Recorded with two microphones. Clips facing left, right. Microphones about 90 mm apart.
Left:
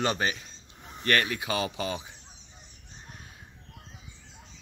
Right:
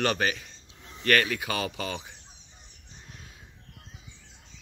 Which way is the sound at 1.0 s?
15° left (ahead or behind).